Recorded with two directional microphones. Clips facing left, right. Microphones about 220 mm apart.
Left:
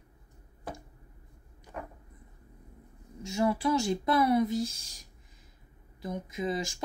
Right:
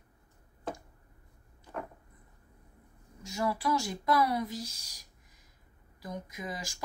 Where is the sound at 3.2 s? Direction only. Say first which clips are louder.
Left 5 dB; 25° left (ahead or behind).